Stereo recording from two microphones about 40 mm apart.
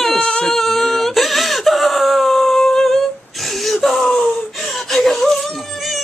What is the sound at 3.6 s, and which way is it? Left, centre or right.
Speech, centre.